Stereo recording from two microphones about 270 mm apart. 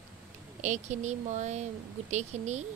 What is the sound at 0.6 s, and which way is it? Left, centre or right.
A woman's voice, right.